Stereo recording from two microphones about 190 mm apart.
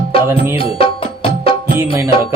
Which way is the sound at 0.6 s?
30° left (ahead or behind).